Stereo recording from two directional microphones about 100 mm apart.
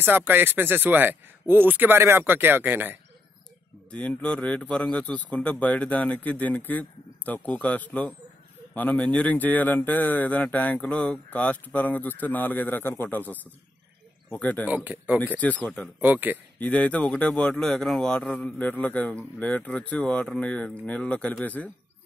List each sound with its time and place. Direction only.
0.0 s speech: 20° right (ahead or behind)
3.9 s speech: 10° left (ahead or behind)
14.7 s speech: 15° right (ahead or behind)
15.1 s speech: 15° left (ahead or behind)
16.0 s speech: 20° right (ahead or behind)
16.5 s speech: 15° left (ahead or behind)